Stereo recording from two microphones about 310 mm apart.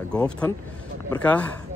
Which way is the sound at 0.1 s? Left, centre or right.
Centre.